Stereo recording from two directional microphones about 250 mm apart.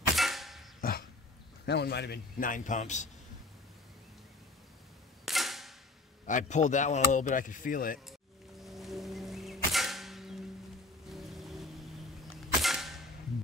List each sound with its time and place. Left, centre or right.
0.1 s clang: centre
0.7 s cough: left
1.7 s a man's voice: left
5.2 s cap gun: centre
6.2 s speech: left
8.6 s arrow: centre
11.1 s music: centre
12.6 s cap gun: centre